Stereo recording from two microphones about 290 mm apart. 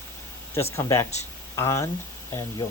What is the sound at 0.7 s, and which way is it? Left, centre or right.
Speech, centre.